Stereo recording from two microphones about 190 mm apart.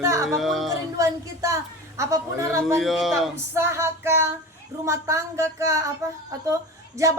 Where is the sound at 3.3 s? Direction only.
15° right (ahead or behind).